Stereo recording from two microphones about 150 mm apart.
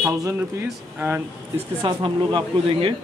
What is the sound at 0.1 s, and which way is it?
Speech, 20° right (ahead or behind).